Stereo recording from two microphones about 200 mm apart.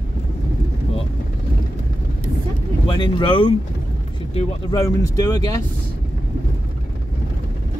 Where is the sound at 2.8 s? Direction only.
25° left (ahead or behind).